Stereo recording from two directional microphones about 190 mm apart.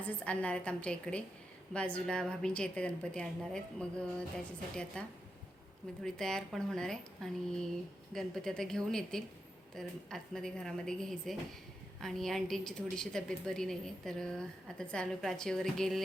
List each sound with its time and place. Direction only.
0.3 s a woman's voice: 5° left (ahead or behind)